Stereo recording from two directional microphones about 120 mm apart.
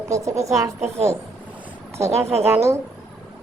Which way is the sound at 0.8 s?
65° right (ahead or behind).